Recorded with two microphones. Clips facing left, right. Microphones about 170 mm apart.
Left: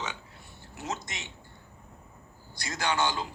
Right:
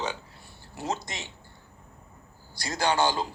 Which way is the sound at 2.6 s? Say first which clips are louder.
Right 4 dB; 35° right (ahead or behind).